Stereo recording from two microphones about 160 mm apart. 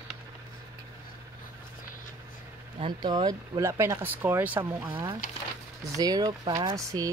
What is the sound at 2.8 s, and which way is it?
Speech, 25° right (ahead or behind).